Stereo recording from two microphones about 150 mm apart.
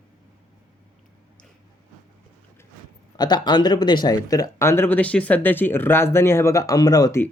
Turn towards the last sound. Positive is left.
turn(degrees=25)  # may be behind; listen again after turning